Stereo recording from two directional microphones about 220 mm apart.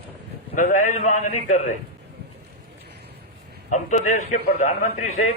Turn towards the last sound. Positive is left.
turn(degrees=30)  # may be behind; listen again after turning